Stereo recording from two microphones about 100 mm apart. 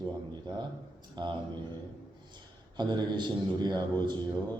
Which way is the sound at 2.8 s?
50° right (ahead or behind).